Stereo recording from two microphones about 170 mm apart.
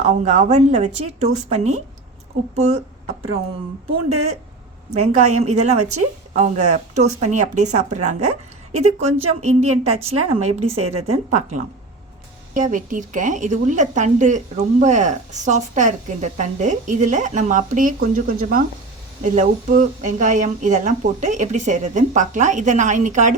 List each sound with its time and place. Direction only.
0.1 s a woman's voice: 40° right (ahead or behind)
3.8 s a woman's voice: 35° right (ahead or behind)
9.4 s a woman's voice: 40° right (ahead or behind)